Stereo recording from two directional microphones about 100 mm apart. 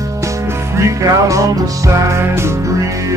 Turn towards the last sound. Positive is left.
turn(degrees=-30)  # may be behind; listen again after turning